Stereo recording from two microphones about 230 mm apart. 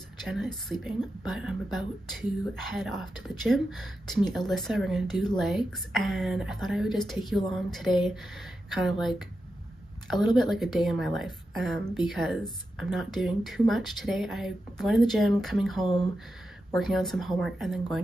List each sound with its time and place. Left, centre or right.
0.2 s speech: centre
15.8 s speech: centre
16.7 s speech: centre